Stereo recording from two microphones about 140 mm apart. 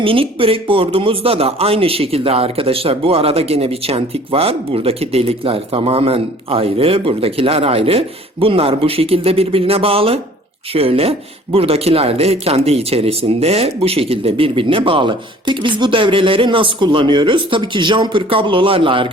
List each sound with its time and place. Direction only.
0.0 s speech: 40° right (ahead or behind)